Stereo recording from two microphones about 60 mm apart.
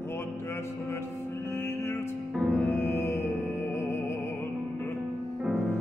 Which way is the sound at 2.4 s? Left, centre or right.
Centre.